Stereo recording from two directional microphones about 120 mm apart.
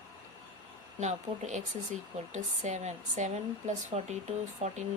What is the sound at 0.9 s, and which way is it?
A woman's voice, 80° right.